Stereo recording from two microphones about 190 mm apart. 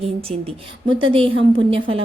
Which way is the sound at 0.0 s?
30° right (ahead or behind).